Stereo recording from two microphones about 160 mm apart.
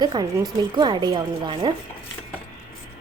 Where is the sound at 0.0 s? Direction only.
25° right (ahead or behind).